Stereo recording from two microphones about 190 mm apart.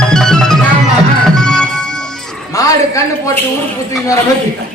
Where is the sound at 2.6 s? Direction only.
15° left (ahead or behind).